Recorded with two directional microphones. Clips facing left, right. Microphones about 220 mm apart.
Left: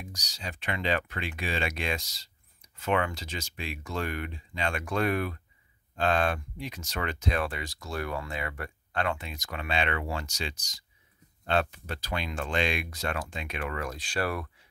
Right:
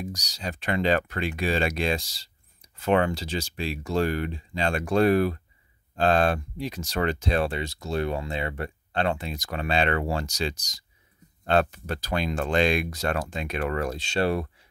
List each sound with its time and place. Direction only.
0.0 s speech: 40° right (ahead or behind)